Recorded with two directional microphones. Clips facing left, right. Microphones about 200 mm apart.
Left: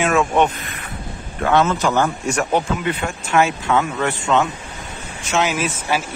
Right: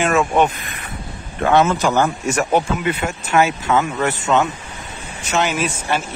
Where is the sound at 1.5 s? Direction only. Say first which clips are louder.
Right 1 dB; 10° right (ahead or behind).